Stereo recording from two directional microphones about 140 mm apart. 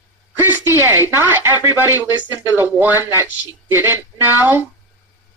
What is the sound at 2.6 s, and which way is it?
Speech, 15° right (ahead or behind).